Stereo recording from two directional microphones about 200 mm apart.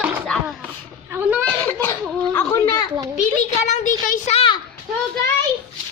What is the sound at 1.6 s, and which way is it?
Speech, 10° left (ahead or behind).